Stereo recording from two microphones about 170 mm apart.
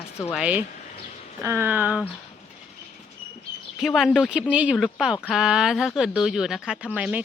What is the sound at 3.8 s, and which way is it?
Speech, centre (ahead or behind).